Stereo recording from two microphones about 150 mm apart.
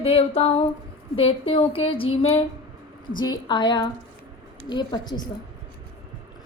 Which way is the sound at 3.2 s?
30° left (ahead or behind).